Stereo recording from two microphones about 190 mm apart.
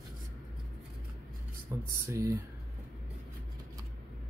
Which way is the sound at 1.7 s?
15° right (ahead or behind).